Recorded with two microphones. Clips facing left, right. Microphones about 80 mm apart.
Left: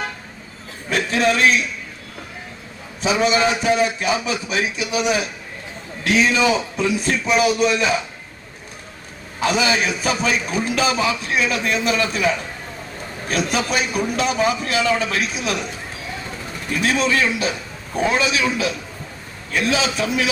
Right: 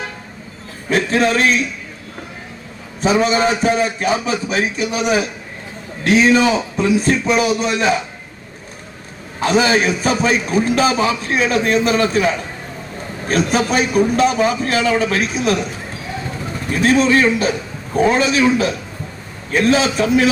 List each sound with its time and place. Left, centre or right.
0.9 s a man's voice: right
3.0 s a man's voice: right
7.0 s a man's voice: right
9.4 s a man's voice: right
16.7 s a man's voice: right